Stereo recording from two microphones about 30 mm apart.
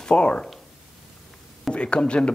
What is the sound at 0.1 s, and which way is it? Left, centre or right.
Speech, left.